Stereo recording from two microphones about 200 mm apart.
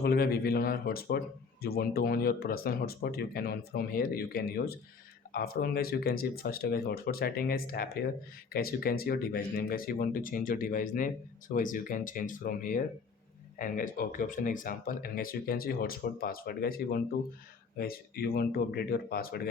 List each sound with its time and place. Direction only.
0.0 s speech: 50° left (ahead or behind)